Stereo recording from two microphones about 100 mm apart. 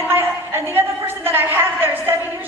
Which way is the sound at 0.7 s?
20° right (ahead or behind).